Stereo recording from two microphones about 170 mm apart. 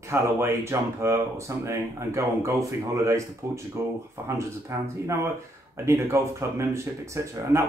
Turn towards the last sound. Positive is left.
turn(degrees=-15)  # may be behind; listen again after turning